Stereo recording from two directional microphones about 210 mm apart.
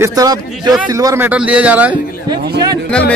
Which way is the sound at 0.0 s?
15° right (ahead or behind).